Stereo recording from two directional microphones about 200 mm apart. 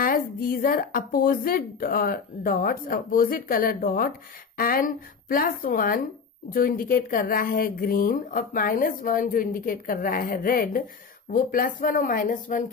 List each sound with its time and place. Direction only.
0.0 s speech: 45° left (ahead or behind)